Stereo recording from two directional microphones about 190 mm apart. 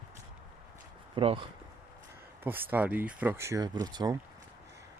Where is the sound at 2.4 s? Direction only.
10° right (ahead or behind).